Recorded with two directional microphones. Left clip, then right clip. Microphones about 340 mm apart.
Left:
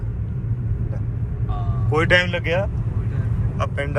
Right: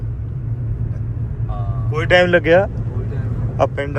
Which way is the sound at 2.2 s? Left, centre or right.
Right.